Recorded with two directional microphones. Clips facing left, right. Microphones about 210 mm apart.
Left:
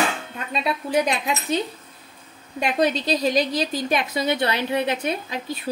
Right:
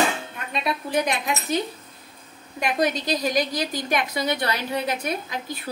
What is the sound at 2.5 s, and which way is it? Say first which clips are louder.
A woman's voice: left 2 dB; 25° left (ahead or behind).